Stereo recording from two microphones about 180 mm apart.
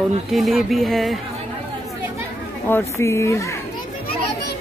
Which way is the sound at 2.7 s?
15° left (ahead or behind).